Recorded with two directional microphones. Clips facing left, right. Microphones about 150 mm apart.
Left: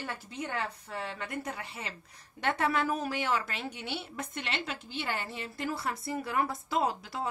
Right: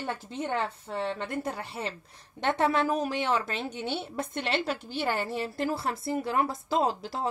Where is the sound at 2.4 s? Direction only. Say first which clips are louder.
Right 4 dB; 25° right (ahead or behind).